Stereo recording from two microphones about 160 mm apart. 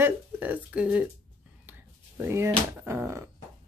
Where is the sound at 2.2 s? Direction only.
15° right (ahead or behind).